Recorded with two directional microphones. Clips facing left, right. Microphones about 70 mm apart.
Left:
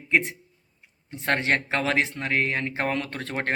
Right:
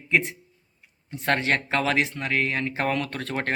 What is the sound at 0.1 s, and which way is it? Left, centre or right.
Speech, left.